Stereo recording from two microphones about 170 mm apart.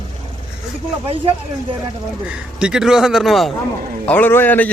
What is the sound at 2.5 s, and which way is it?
Speech, 5° right (ahead or behind).